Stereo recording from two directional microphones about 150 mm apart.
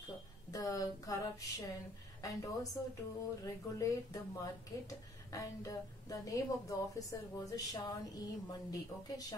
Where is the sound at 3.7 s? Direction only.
25° left (ahead or behind).